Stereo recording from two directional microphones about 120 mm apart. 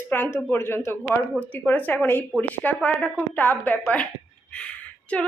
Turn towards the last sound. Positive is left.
turn(degrees=10)  # may be behind; listen again after turning